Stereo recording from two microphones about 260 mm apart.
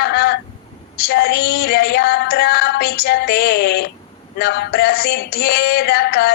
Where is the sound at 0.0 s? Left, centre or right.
Left.